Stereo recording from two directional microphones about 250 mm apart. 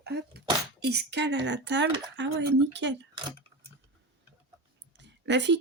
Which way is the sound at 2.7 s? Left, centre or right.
Right.